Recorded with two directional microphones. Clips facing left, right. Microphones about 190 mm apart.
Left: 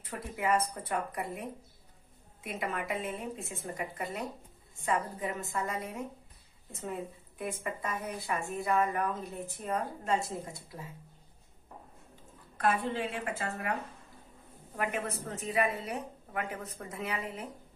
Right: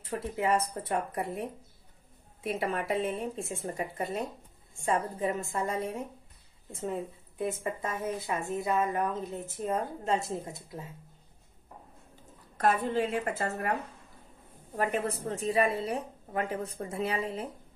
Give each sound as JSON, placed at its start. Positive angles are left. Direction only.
{"t": 0.0, "sound": "speech", "side_deg": -30}
{"t": 2.4, "sound": "speech", "side_deg": -30}
{"t": 12.5, "sound": "a woman's voice", "side_deg": -40}
{"t": 14.8, "sound": "speech", "side_deg": -30}